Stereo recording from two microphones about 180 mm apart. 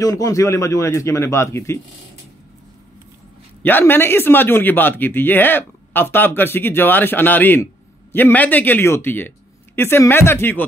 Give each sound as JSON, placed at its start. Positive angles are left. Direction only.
{"t": 0.0, "sound": "speech", "side_deg": 20}
{"t": 3.6, "sound": "speech", "side_deg": 10}